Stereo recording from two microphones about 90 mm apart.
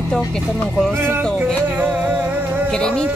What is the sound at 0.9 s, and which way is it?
Music, 25° right (ahead or behind).